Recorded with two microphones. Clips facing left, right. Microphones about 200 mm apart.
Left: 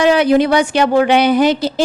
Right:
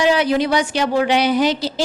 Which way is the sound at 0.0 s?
55° left (ahead or behind).